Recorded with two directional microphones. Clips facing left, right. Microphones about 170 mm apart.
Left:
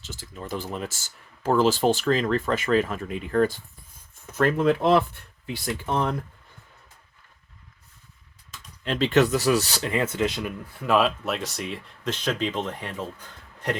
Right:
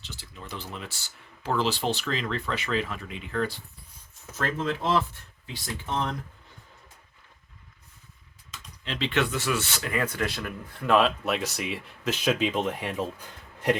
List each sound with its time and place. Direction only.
0.0 s speech: 45° left (ahead or behind)
4.4 s speech: 60° left (ahead or behind)
8.8 s speech: 45° left (ahead or behind); by 10.5 s 20° left (ahead or behind)
10.8 s speech: 5° left (ahead or behind)